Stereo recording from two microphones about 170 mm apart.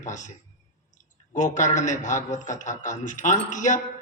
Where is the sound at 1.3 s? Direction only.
45° left (ahead or behind).